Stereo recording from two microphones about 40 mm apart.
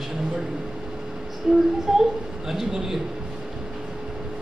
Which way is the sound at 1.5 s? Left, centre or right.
Centre.